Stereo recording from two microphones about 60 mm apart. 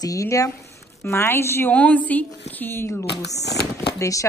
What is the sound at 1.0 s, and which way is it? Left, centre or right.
Speech, left.